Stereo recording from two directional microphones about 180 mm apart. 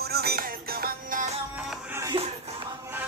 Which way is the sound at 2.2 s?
35° right (ahead or behind).